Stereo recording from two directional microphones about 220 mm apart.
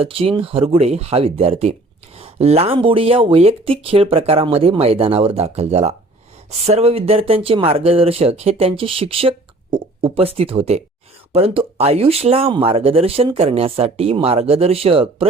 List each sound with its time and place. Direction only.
0.0 s speech: 25° right (ahead or behind)